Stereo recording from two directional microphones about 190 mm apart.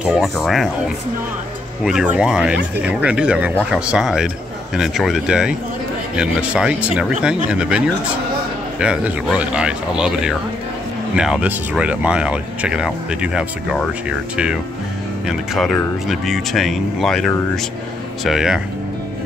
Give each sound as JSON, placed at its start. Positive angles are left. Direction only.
{"t": 0.1, "sound": "speech", "side_deg": 0}
{"t": 2.1, "sound": "speech", "side_deg": -5}